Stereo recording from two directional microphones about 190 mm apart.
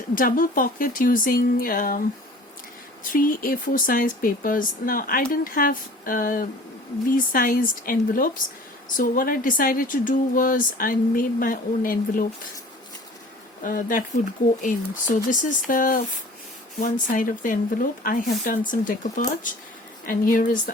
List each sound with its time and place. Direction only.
0.1 s a woman's voice: 45° left (ahead or behind)
3.0 s a woman's voice: 45° left (ahead or behind)
13.7 s a woman's voice: 45° left (ahead or behind)